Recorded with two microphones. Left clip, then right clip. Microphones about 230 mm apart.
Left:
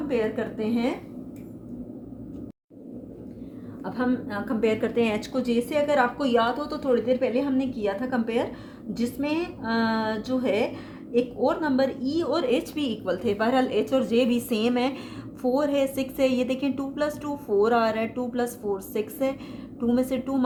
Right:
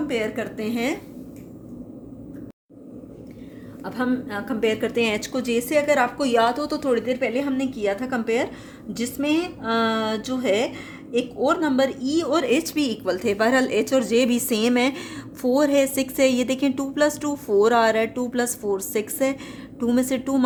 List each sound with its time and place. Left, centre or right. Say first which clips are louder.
0.1 s a woman's voice: right 1 dB; right
3.8 s a woman's voice: right 2 dB; right